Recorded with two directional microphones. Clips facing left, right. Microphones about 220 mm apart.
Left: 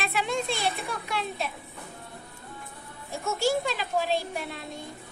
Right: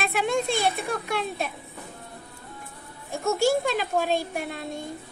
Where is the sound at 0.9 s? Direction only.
45° right (ahead or behind).